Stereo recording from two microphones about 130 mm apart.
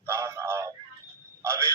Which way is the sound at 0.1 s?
20° right (ahead or behind).